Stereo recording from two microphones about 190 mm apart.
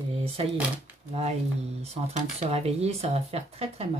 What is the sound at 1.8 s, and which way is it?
Speech, 35° right (ahead or behind).